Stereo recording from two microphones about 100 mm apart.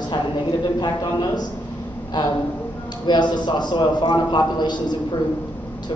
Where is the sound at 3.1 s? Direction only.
45° left (ahead or behind).